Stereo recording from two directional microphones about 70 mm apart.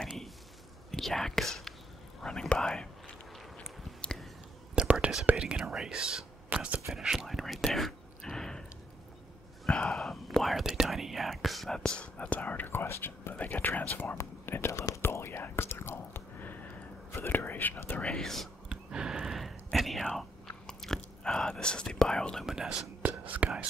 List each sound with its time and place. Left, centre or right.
0.9 s speech: centre
3.5 s a sound: centre
4.8 s whispering: centre
5.3 s speech: centre
6.9 s whispering: centre
9.7 s whispering: centre; by 13.3 s left
13.3 s speech: left
14.1 s whispering: left
18.0 s speech: centre
18.7 s whispering: centre
22.5 s speech: centre
23.0 s speech: right